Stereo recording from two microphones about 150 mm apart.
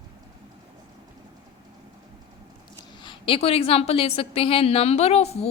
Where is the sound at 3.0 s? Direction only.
35° left (ahead or behind).